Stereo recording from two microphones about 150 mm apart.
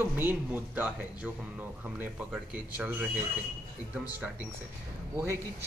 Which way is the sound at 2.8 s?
10° right (ahead or behind).